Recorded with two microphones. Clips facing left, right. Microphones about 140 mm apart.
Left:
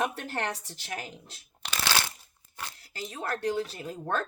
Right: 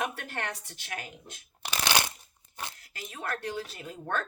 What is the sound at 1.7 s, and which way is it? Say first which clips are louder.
Crushing: right 1 dB; 15° right (ahead or behind).